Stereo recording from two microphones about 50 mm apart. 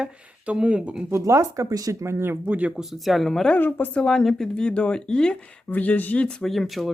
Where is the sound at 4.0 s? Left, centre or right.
Centre.